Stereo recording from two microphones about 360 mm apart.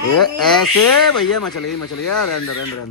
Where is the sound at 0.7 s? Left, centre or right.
Left.